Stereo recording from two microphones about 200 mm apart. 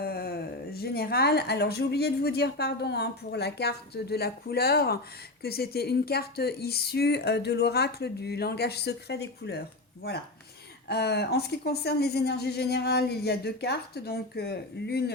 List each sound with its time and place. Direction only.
0.0 s a woman's voice: 50° left (ahead or behind)
10.8 s a woman's voice: 55° left (ahead or behind)